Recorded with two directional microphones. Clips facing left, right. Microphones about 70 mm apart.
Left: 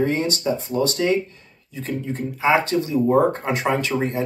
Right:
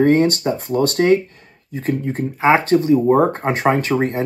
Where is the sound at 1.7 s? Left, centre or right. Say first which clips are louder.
Right 6 dB; right.